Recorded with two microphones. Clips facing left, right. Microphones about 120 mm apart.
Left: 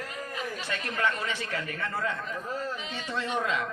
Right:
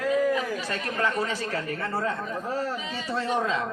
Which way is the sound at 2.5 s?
75° right (ahead or behind).